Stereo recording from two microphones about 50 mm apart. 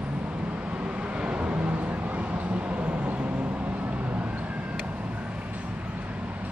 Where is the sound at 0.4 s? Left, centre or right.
Right.